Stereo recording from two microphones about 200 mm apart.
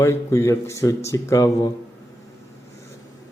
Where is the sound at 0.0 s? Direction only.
15° left (ahead or behind).